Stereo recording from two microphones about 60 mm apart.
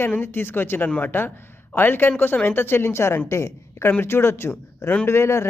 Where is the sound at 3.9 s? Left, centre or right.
Left.